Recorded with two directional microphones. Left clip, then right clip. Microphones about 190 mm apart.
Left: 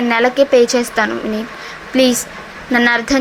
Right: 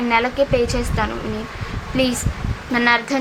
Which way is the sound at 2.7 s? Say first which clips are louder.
Left 4 dB; 20° left (ahead or behind).